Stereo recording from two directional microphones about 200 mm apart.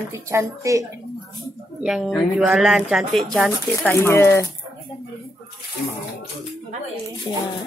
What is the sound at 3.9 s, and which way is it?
Speech, 10° left (ahead or behind).